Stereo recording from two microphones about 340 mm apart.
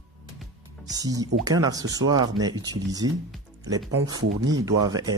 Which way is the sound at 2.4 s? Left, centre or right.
Centre.